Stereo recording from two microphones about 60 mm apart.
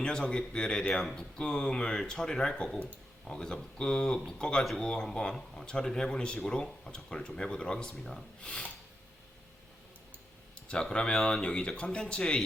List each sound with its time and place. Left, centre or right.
0.0 s speech: centre
7.9 s speech: centre
8.4 s speech: centre
10.9 s speech: centre